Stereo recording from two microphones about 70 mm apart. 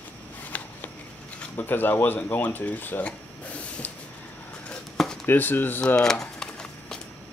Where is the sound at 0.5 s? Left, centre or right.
Left.